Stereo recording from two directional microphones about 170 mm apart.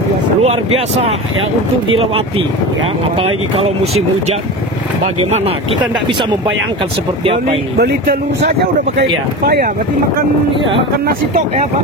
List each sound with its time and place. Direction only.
0.4 s speech: 35° right (ahead or behind)
3.8 s speech: 40° right (ahead or behind)
8.9 s speech: 65° right (ahead or behind)